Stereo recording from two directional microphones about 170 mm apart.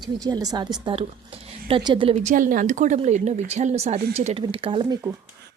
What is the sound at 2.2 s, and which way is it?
Speech, 50° right (ahead or behind).